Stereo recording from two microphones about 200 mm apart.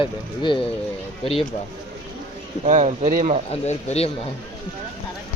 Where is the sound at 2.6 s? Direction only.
35° right (ahead or behind).